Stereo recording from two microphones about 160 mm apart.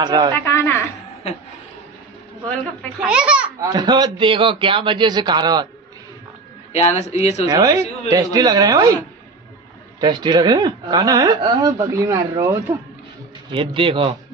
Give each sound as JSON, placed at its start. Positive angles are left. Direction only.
{"t": 0.0, "sound": "speech", "side_deg": -25}
{"t": 0.5, "sound": "a sound", "side_deg": 15}
{"t": 3.0, "sound": "speech", "side_deg": -5}
{"t": 3.7, "sound": "speech", "side_deg": -25}
{"t": 6.7, "sound": "a man's voice", "side_deg": 45}
{"t": 7.4, "sound": "speech", "side_deg": -20}
{"t": 9.9, "sound": "speech", "side_deg": -30}
{"t": 13.5, "sound": "a man's voice", "side_deg": -35}